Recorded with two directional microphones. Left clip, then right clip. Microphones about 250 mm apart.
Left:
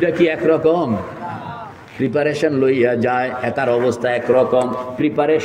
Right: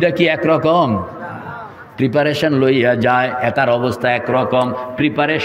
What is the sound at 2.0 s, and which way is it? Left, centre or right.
A man's voice, right.